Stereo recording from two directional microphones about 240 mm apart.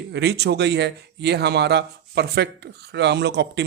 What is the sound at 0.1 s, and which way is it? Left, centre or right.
Speech, right.